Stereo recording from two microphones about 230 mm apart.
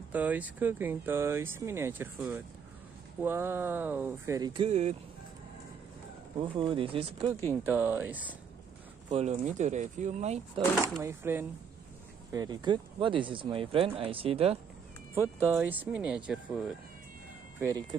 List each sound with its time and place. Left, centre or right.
0.1 s speech: centre; by 4.9 s right
6.6 s speech: right
7.6 s speech: centre
9.1 s speech: right
11.0 s speech: centre; by 14.6 s right
15.1 s speech: centre
17.6 s speech: centre